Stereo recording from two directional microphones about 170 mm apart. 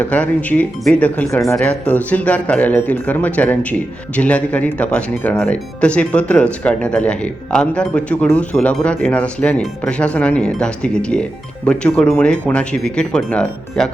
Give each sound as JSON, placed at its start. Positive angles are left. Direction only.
{"t": 0.0, "sound": "speech", "side_deg": 10}